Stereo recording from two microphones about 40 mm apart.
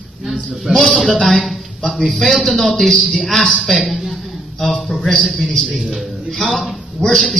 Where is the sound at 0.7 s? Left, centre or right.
Right.